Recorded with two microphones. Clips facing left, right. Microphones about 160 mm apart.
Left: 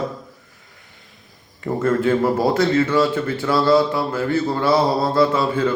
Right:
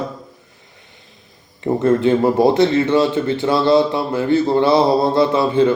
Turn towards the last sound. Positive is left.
turn(degrees=-20)  # may be behind; listen again after turning